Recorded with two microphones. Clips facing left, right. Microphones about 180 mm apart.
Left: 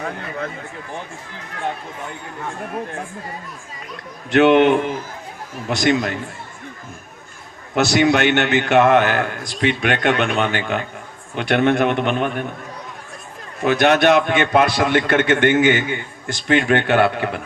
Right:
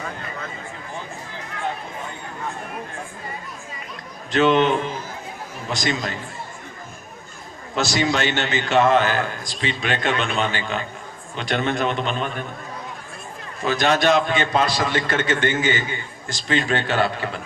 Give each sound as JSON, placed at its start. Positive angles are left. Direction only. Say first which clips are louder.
{"t": 0.0, "sound": "a man's voice", "louder": "left 5 dB", "side_deg": 60}
{"t": 4.3, "sound": "a man's voice", "louder": "left 5 dB", "side_deg": 65}
{"t": 7.8, "sound": "a man's voice", "louder": "left 6 dB", "side_deg": 60}
{"t": 13.6, "sound": "a man's voice", "louder": "left 5 dB", "side_deg": 60}